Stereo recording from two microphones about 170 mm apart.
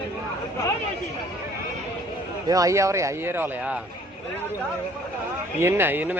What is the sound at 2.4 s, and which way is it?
Speech, 20° right (ahead or behind).